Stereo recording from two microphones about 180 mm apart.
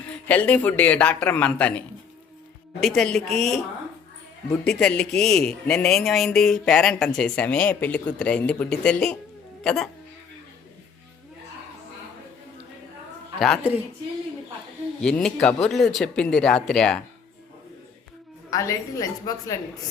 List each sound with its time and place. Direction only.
0.3 s speech: 10° left (ahead or behind)
2.8 s speech: 5° left (ahead or behind)
4.6 s speech: 5° left (ahead or behind)
13.4 s speech: centre (ahead or behind)
15.0 s speech: 5° left (ahead or behind)
18.5 s speech: 20° left (ahead or behind)